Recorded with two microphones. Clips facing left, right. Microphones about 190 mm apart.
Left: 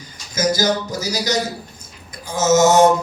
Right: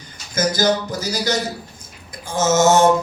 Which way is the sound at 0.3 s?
55° right (ahead or behind).